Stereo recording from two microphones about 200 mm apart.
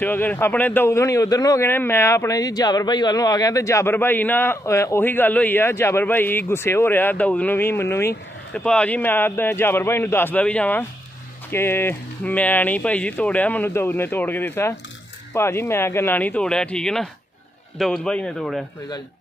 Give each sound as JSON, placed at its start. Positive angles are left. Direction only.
{"t": 0.0, "sound": "a man's voice", "side_deg": 10}